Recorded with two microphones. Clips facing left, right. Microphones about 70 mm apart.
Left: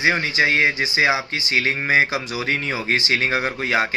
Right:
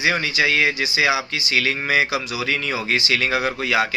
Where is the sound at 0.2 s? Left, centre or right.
Left.